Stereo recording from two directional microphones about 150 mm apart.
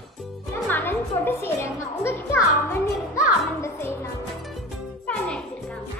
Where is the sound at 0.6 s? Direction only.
15° left (ahead or behind).